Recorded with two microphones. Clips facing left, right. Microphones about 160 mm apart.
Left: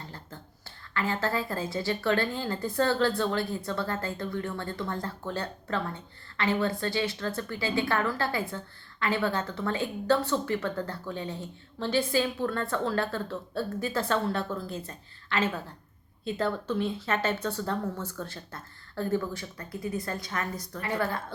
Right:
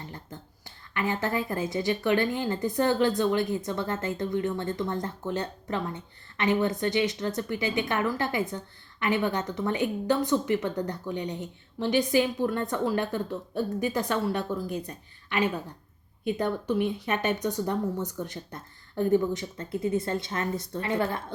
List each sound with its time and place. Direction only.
0.0 s a woman's voice: 20° right (ahead or behind)